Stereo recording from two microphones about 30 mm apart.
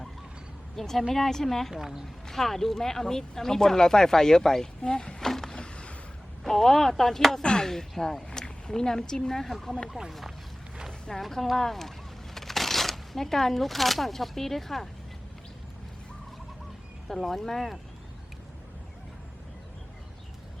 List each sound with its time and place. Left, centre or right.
0.8 s speech: centre
1.7 s speech: centre
2.3 s speech: centre; by 5.1 s left
5.2 s a sound: centre
5.5 s a sound: left
6.4 s speech: centre
8.3 s speech: left
9.5 s speech: centre
11.1 s speech: centre
17.2 s speech: centre
17.4 s speech: centre